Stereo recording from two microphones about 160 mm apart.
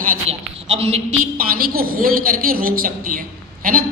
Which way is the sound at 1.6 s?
70° right (ahead or behind).